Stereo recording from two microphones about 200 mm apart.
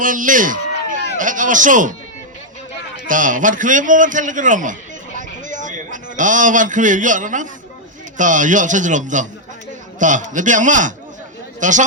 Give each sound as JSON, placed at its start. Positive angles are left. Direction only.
{"t": 0.0, "sound": "a man's voice", "side_deg": -40}
{"t": 3.1, "sound": "a man's voice", "side_deg": -40}